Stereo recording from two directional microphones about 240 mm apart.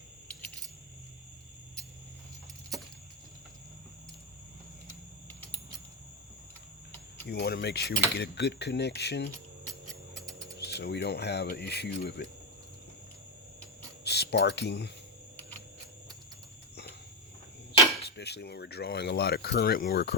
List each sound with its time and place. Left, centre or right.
7.3 s speech: left
10.6 s speech: left
14.0 s speech: left
18.0 s speech: left